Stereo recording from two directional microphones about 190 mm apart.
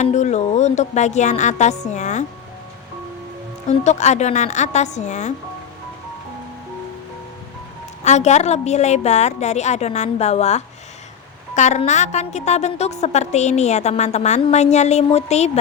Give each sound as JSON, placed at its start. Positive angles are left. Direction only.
{"t": 0.0, "sound": "a woman's voice", "side_deg": 40}
{"t": 3.7, "sound": "a woman's voice", "side_deg": 35}
{"t": 8.0, "sound": "a woman's voice", "side_deg": 40}